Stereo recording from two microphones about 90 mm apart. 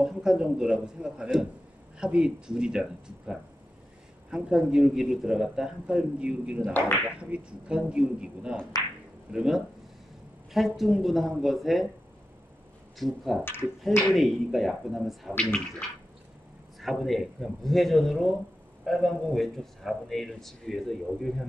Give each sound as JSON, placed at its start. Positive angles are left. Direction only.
{"t": 0.0, "sound": "a man's voice", "side_deg": -5}
{"t": 13.0, "sound": "a man's voice", "side_deg": 0}
{"t": 13.4, "sound": "speech", "side_deg": 25}
{"t": 14.1, "sound": "a man's voice", "side_deg": 0}
{"t": 16.8, "sound": "a man's voice", "side_deg": 0}